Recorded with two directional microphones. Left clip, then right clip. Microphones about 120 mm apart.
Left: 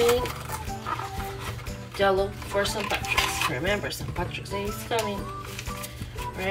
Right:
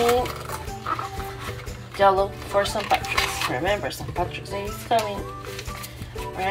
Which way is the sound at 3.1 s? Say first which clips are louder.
Right 1 dB; 15° left (ahead or behind).